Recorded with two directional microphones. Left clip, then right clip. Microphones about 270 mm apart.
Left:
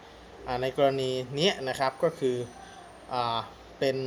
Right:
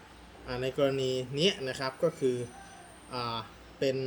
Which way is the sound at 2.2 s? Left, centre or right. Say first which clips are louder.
Left 2 dB; centre.